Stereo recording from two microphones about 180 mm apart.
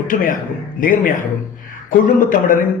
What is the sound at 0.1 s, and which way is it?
A man's voice, 50° left (ahead or behind).